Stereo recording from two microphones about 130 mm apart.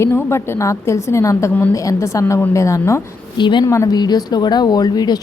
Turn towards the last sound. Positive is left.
turn(degrees=30)  # may be behind; listen again after turning